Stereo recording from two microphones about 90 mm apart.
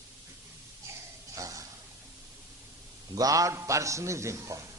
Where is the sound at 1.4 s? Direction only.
40° right (ahead or behind).